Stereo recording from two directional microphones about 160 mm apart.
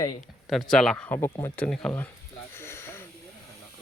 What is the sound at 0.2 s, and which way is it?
Speech, centre (ahead or behind).